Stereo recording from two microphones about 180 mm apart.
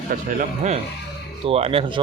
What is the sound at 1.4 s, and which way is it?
Speech, 30° right (ahead or behind).